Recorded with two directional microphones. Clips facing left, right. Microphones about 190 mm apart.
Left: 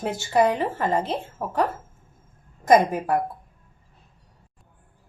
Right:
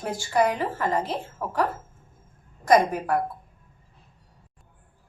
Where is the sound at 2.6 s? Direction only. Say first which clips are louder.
Left 2 dB; 20° left (ahead or behind).